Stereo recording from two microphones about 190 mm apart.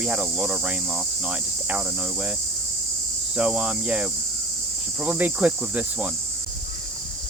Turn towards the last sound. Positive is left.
turn(degrees=-5)  # may be behind; listen again after turning